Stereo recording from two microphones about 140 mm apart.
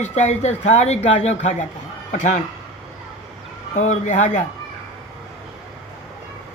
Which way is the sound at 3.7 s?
60° left (ahead or behind).